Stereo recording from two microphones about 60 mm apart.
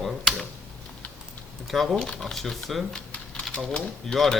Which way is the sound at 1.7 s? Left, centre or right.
Centre.